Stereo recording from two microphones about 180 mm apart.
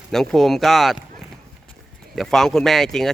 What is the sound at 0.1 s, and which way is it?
Speech, centre (ahead or behind).